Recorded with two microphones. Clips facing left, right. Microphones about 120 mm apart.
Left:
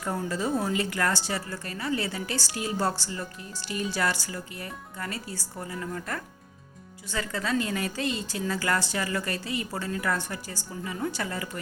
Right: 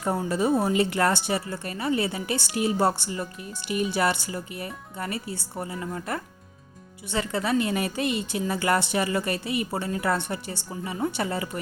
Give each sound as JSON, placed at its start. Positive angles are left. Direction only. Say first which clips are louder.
{"t": 0.3, "sound": "a woman's voice", "louder": "right 5 dB", "side_deg": -20}